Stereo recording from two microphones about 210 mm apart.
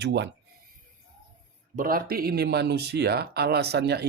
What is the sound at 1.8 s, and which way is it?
Speech, 45° right (ahead or behind).